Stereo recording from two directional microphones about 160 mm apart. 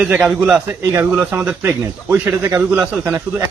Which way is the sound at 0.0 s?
5° right (ahead or behind).